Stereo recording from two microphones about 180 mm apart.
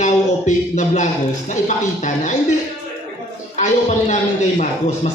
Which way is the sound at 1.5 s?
40° left (ahead or behind).